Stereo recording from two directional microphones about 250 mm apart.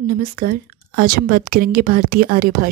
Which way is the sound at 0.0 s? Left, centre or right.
Right.